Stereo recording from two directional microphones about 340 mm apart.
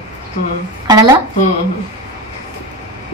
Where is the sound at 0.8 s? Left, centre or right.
Centre.